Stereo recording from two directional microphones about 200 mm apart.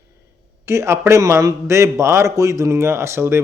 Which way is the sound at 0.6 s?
15° right (ahead or behind).